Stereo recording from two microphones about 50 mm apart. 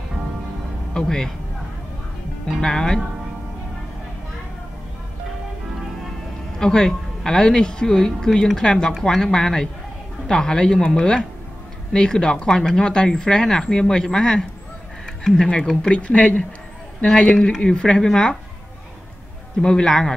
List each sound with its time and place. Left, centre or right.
0.9 s speech: centre
2.6 s speech: centre
6.6 s speech: centre
15.9 s speech: left
19.6 s speech: centre